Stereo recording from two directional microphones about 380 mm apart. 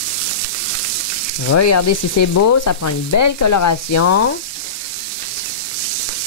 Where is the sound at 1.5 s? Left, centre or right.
Left.